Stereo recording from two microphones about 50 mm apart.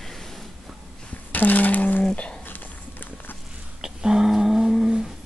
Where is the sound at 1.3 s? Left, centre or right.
Left.